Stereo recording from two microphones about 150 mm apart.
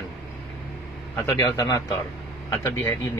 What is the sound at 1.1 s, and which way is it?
Speech, 20° left (ahead or behind).